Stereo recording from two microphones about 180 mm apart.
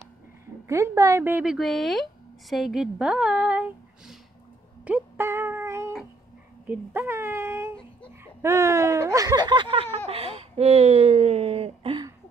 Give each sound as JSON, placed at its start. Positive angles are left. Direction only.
{"t": 0.7, "sound": "speech", "side_deg": -15}
{"t": 4.8, "sound": "a sound", "side_deg": -10}
{"t": 6.7, "sound": "speech", "side_deg": -10}